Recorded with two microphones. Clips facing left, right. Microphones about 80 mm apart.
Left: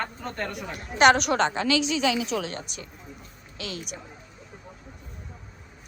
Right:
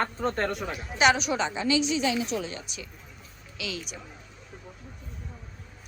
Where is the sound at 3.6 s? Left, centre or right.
Left.